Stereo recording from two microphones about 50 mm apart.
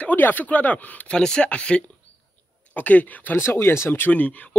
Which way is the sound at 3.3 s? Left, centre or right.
Left.